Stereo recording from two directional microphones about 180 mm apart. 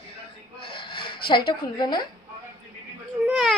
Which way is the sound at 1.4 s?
25° left (ahead or behind).